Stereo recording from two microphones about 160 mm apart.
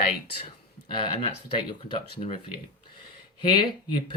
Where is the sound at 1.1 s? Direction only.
35° left (ahead or behind).